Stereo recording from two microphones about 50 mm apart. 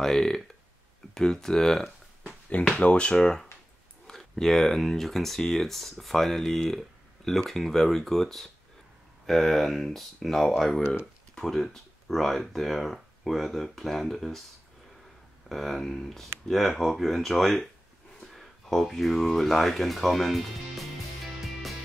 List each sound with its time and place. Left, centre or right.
0.0 s speech: centre
2.5 s speech: left; by 14.4 s centre
15.4 s speech: centre